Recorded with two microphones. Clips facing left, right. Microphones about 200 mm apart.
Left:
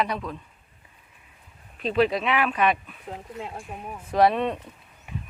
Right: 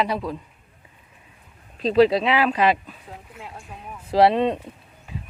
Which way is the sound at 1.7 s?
35° right (ahead or behind).